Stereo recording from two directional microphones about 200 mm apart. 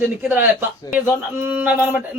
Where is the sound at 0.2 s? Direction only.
10° right (ahead or behind).